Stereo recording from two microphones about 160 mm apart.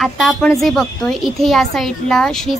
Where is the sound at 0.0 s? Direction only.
Centre (ahead or behind).